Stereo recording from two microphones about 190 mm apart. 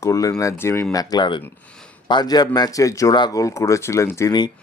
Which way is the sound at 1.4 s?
5° left (ahead or behind).